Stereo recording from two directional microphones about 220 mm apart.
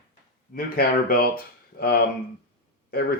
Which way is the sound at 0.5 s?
45° left (ahead or behind).